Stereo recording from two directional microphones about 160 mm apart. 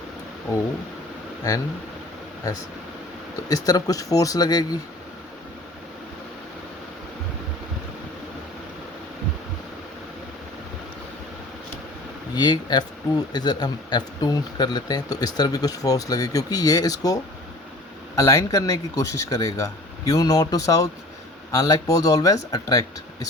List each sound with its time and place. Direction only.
0.5 s speech: 20° left (ahead or behind)
2.5 s speech: 25° left (ahead or behind)
12.3 s speech: 25° left (ahead or behind)
18.2 s speech: 20° left (ahead or behind)